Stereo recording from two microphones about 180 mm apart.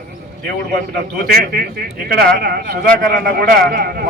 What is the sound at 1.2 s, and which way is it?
A man's voice, 60° right (ahead or behind).